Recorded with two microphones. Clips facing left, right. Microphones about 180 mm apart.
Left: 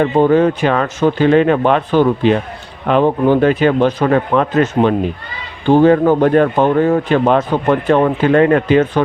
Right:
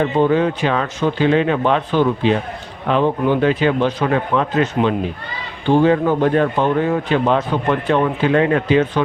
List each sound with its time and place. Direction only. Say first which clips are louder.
0.0 s speech: left 4 dB; 45° left (ahead or behind)